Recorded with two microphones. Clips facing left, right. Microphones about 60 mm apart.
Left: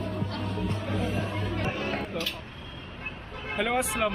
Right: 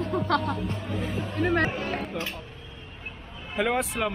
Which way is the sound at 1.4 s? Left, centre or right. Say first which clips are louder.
Right 9 dB; right.